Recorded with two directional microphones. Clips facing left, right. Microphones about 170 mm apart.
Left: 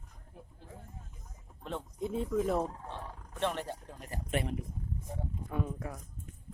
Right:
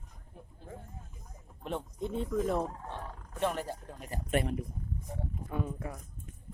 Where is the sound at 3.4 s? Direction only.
5° right (ahead or behind).